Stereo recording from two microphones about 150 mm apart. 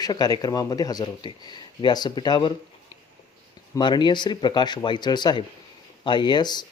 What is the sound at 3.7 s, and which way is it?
Speech, 30° left (ahead or behind).